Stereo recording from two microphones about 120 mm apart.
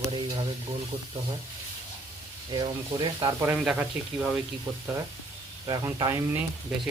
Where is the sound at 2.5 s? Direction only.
40° right (ahead or behind).